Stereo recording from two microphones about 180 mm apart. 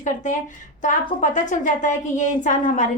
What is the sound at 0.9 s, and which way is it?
A woman's voice, 45° left (ahead or behind).